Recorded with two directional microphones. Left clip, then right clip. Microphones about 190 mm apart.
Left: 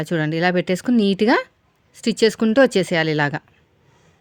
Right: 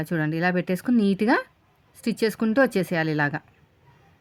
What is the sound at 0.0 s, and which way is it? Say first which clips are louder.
Speech: left 5 dB; 35° left (ahead or behind).